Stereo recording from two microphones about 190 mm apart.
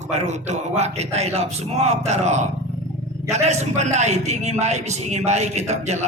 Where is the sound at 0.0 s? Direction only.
35° right (ahead or behind).